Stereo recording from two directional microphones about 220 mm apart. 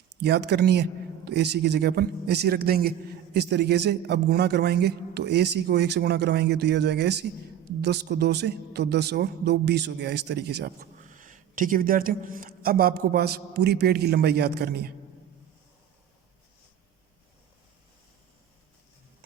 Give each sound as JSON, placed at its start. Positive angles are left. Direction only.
{"t": 0.2, "sound": "a man's voice", "side_deg": -50}